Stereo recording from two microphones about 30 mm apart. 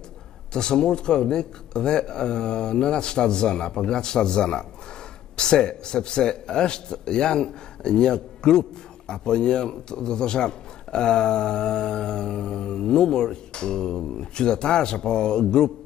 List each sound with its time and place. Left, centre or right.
0.5 s a man's voice: left